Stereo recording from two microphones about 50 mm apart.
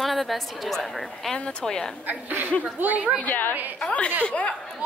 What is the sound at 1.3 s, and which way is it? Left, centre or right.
Speech, centre.